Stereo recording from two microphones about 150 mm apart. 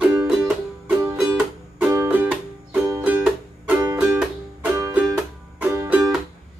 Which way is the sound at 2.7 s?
10° right (ahead or behind).